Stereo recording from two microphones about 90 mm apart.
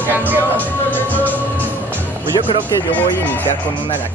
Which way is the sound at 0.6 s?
20° left (ahead or behind).